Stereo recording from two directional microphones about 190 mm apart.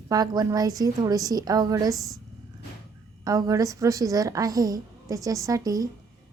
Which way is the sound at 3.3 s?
20° right (ahead or behind).